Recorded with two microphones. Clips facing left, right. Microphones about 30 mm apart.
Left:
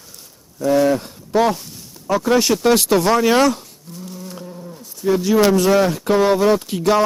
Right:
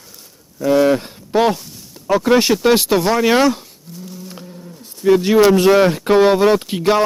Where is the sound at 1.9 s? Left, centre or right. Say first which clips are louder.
Right 3 dB; centre.